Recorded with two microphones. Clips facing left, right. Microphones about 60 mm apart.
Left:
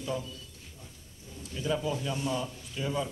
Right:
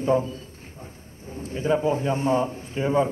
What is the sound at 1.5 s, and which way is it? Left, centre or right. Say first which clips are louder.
A man's voice: right 9 dB; right.